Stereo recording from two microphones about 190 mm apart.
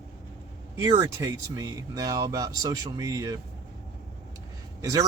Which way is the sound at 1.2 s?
20° right (ahead or behind).